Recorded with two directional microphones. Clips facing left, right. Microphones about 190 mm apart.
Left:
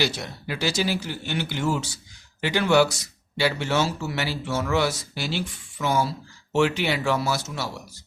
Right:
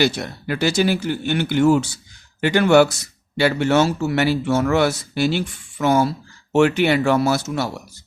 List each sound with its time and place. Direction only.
0.0 s speech: 55° right (ahead or behind)